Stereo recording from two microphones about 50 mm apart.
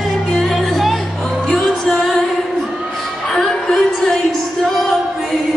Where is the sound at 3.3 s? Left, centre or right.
Centre.